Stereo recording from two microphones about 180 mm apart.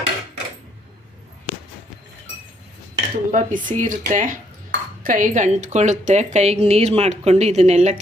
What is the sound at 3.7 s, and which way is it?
A woman's voice, 45° right (ahead or behind).